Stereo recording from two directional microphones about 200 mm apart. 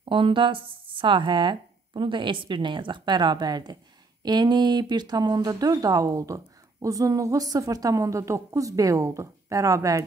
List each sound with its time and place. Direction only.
0.0 s speech: 25° right (ahead or behind)